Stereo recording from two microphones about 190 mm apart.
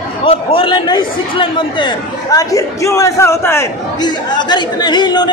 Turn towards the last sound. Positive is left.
turn(degrees=20)  # may be behind; listen again after turning